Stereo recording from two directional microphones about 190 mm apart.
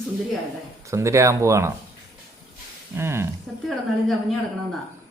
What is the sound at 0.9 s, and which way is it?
Speech, 15° right (ahead or behind).